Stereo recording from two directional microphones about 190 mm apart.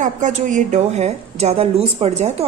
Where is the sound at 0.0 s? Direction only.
40° right (ahead or behind).